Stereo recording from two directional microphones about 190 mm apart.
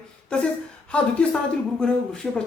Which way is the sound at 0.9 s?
5° left (ahead or behind).